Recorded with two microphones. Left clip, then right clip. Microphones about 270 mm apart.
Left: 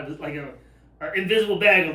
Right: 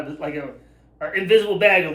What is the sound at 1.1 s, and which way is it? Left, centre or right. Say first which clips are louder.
Speech: right 4 dB; centre.